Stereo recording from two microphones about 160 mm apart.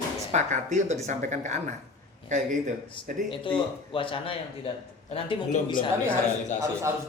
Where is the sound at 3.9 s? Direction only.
35° left (ahead or behind).